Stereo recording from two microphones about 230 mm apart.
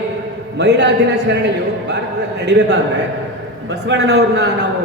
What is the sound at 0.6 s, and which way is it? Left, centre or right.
Speech, right.